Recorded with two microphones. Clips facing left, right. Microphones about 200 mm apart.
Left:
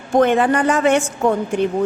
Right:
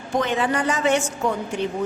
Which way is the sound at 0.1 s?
55° left (ahead or behind).